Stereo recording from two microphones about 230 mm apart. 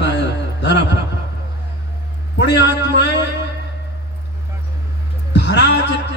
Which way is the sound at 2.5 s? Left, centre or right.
Left.